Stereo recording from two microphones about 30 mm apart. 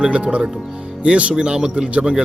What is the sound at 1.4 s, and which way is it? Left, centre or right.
Speech, right.